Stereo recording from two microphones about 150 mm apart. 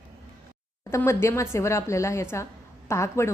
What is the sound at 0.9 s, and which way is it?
A woman's voice, 20° left (ahead or behind).